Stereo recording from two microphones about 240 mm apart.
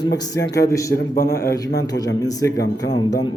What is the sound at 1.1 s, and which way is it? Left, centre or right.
Speech, left.